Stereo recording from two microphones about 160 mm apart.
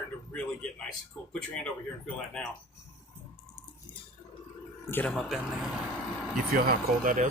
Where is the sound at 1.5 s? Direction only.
5° left (ahead or behind).